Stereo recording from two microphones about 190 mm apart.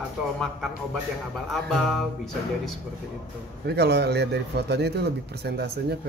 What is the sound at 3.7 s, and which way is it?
A man's voice, 60° right (ahead or behind).